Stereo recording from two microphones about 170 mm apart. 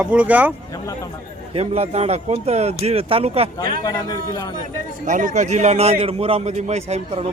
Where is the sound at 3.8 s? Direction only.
20° left (ahead or behind).